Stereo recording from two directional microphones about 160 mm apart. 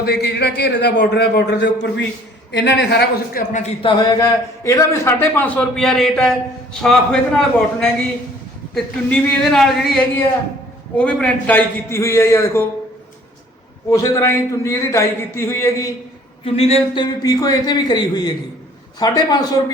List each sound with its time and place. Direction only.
0.0 s a man's voice: 90° left
3.8 s a man's voice: 30° left (ahead or behind)
13.9 s a man's voice: 20° left (ahead or behind)
16.5 s a man's voice: 40° left (ahead or behind); by 19.7 s 25° left (ahead or behind)